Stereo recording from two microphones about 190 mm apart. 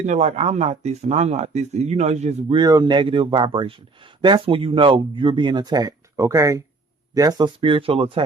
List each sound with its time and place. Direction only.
0.0 s speech: 35° right (ahead or behind)
2.6 s a man's voice: 20° right (ahead or behind)